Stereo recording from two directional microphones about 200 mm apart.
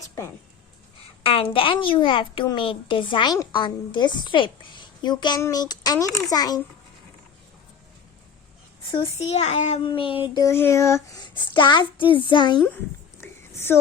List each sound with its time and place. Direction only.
1.2 s a woman's voice: 25° left (ahead or behind)
8.9 s a child's voice: 30° left (ahead or behind)
10.3 s a woman's voice: 15° left (ahead or behind)
12.5 s a sound: 10° left (ahead or behind)